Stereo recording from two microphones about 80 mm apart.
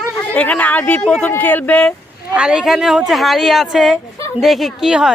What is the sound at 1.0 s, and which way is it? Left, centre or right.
Speech, centre.